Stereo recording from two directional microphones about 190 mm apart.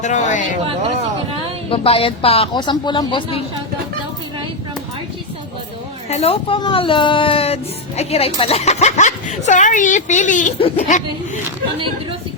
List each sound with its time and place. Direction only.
0.0 s speech: 40° left (ahead or behind)
1.7 s speech: 30° left (ahead or behind)
6.1 s speech: 30° left (ahead or behind)